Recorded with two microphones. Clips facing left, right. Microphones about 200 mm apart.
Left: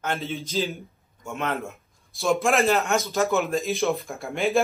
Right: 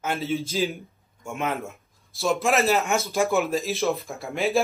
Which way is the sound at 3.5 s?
Centre (ahead or behind).